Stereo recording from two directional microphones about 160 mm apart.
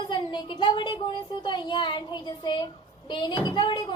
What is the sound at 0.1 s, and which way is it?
A woman's voice, 30° left (ahead or behind).